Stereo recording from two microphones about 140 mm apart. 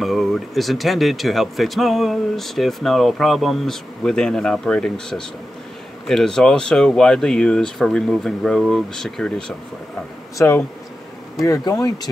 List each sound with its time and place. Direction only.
0.0 s speech: centre (ahead or behind)
10.3 s speech: 20° left (ahead or behind)